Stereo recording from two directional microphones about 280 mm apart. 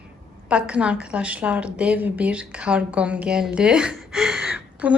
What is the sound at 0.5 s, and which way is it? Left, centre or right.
A woman's voice, centre.